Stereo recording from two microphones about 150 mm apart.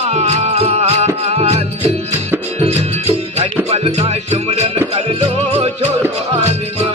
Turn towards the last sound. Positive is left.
turn(degrees=-45)  # may be behind; listen again after turning